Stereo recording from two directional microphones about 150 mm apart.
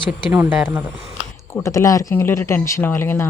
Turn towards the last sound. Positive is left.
turn(degrees=15)  # may be behind; listen again after turning